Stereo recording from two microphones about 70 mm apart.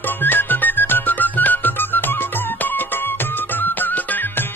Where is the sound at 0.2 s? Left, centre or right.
Left.